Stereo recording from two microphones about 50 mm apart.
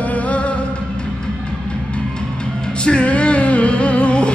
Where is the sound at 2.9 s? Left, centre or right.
Left.